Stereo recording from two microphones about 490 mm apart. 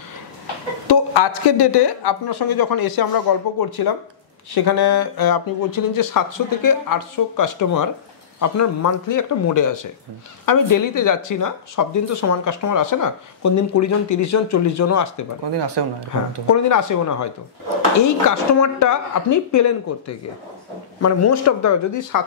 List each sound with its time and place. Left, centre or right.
0.8 s speech: left
15.5 s speech: right
16.4 s speech: left